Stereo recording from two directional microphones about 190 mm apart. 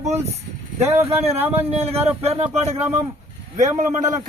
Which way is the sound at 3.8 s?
40° right (ahead or behind).